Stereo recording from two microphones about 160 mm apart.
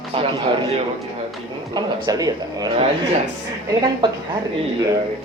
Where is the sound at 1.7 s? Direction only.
25° right (ahead or behind).